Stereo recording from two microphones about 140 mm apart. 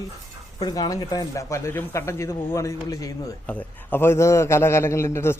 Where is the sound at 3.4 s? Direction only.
15° left (ahead or behind).